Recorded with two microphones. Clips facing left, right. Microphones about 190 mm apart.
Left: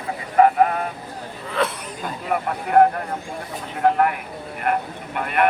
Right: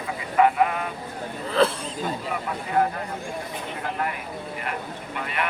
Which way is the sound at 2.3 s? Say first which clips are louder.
Left 10 dB; 60° left (ahead or behind).